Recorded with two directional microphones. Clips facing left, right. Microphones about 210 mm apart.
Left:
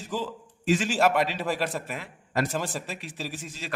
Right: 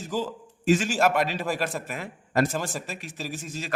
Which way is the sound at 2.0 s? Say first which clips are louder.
Right 6 dB; 45° right (ahead or behind).